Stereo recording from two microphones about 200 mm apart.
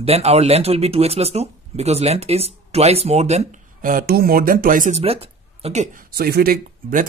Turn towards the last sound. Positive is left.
turn(degrees=-45)  # may be behind; listen again after turning